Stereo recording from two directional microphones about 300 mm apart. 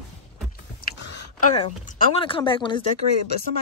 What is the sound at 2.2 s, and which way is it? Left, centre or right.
Speech, centre.